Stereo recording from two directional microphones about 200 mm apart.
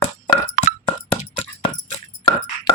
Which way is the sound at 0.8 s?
25° left (ahead or behind).